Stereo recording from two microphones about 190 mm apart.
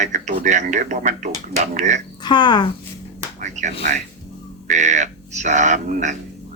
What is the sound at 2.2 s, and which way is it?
Speech, 25° left (ahead or behind).